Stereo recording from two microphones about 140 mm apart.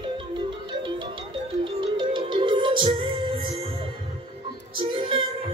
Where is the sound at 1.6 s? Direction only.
35° right (ahead or behind).